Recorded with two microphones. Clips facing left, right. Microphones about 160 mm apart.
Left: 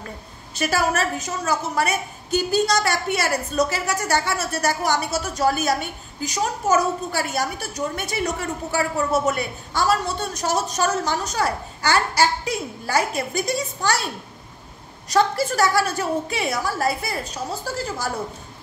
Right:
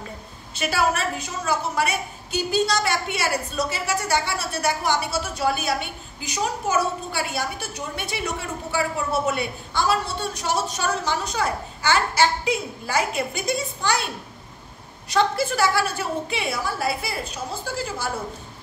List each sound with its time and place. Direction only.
0.6 s a woman's voice: 45° left (ahead or behind)
15.0 s a woman's voice: 40° left (ahead or behind)